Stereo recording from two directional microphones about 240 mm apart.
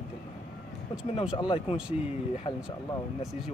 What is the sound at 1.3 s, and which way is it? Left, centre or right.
Speech, centre.